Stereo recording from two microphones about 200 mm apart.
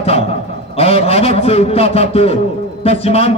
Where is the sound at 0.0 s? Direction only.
30° left (ahead or behind).